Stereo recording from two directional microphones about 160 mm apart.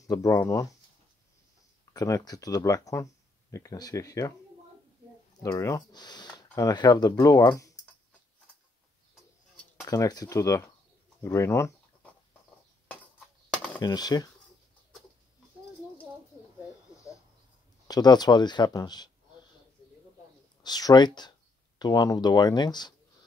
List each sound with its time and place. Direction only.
0.0 s speech: 20° left (ahead or behind)
2.0 s speech: 20° left (ahead or behind)
5.4 s speech: 20° left (ahead or behind)
9.8 s speech: 25° left (ahead or behind)
13.7 s speech: 25° left (ahead or behind)
17.8 s speech: 25° left (ahead or behind)
20.6 s speech: 25° left (ahead or behind)